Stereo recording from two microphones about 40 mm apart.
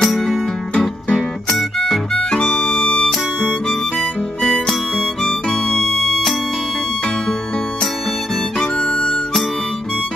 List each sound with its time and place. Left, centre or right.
0.0 s music: centre
1.8 s harmonica: centre
8.5 s music: left